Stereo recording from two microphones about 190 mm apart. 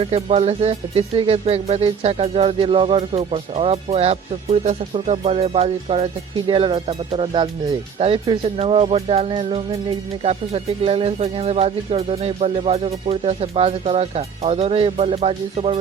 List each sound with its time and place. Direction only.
0.0 s speech: 30° right (ahead or behind)